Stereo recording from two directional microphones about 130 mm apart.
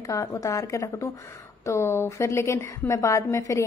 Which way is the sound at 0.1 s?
25° left (ahead or behind).